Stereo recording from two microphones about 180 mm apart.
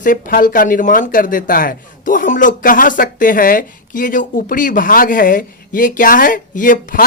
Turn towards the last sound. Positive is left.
turn(degrees=50)  # may be behind; listen again after turning